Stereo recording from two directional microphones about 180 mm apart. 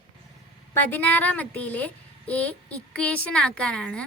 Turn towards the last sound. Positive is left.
turn(degrees=5)  # may be behind; listen again after turning